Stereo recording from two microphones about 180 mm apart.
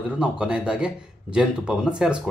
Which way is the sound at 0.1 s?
5° right (ahead or behind).